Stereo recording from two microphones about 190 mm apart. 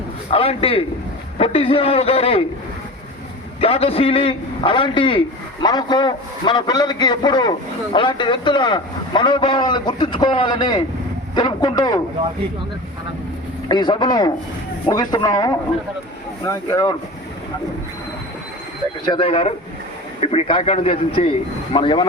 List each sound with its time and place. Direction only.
0.3 s a man's voice: 30° left (ahead or behind)
3.6 s a man's voice: 30° left (ahead or behind)
13.7 s a man's voice: 25° left (ahead or behind)
19.0 s a man's voice: 25° left (ahead or behind)